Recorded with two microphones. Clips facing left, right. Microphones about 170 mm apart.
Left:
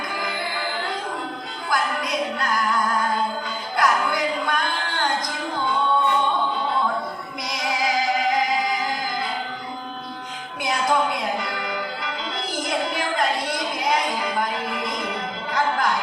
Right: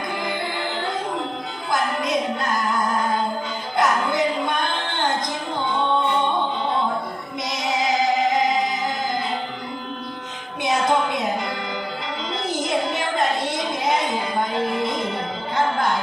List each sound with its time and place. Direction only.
1.7 s music: 20° right (ahead or behind)
7.5 s music: 25° right (ahead or behind)
10.6 s music: 20° right (ahead or behind)
12.5 s a sound: 25° right (ahead or behind)